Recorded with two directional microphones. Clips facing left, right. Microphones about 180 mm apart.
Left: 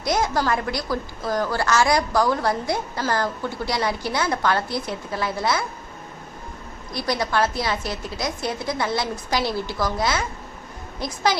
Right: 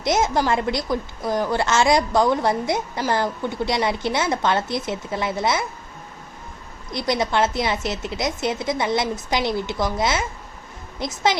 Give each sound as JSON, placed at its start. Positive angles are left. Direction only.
{"t": 0.0, "sound": "a woman's voice", "side_deg": -20}
{"t": 6.9, "sound": "a woman's voice", "side_deg": -20}